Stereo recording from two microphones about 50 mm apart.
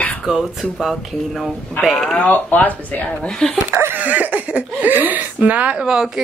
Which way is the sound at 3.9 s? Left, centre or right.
Right.